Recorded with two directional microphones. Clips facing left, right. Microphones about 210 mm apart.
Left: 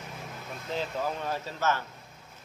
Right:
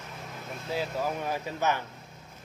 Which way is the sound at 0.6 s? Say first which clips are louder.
Right 1 dB; 10° right (ahead or behind).